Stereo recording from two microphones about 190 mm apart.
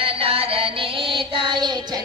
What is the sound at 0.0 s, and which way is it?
Music, 30° right (ahead or behind).